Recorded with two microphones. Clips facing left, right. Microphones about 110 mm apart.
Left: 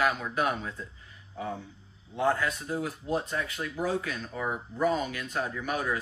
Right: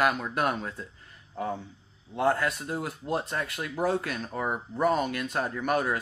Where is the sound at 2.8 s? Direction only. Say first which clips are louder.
Even; 55° right (ahead or behind).